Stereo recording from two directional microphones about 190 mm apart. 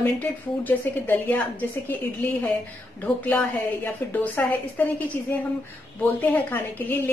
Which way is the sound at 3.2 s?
10° left (ahead or behind).